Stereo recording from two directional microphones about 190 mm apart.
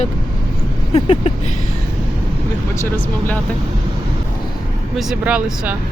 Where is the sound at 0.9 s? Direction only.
30° left (ahead or behind).